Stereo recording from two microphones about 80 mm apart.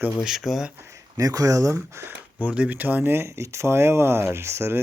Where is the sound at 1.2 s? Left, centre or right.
Right.